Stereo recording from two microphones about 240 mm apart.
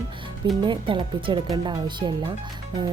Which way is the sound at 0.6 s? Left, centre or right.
Centre.